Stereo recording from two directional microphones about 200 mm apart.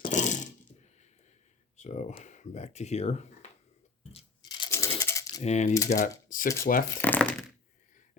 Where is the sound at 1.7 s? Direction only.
35° left (ahead or behind).